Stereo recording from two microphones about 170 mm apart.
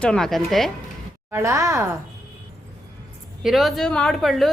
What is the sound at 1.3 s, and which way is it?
Speech, 15° right (ahead or behind).